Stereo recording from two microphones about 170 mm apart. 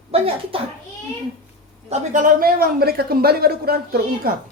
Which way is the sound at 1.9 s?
50° right (ahead or behind).